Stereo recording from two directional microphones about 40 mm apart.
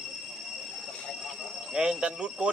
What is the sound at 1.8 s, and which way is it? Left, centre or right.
Speech, right.